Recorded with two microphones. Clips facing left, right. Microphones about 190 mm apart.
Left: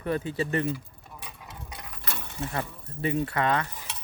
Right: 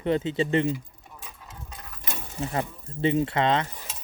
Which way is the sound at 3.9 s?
65° left (ahead or behind).